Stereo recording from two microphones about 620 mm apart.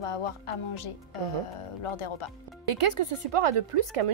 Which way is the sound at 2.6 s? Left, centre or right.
Right.